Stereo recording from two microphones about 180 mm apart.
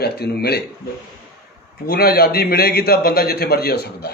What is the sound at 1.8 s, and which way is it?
A man's voice, 60° left (ahead or behind).